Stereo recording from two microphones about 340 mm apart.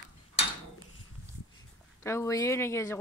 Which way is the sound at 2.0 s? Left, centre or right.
Centre.